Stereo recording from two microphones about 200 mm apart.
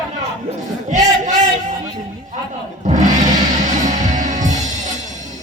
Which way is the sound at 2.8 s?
40° right (ahead or behind).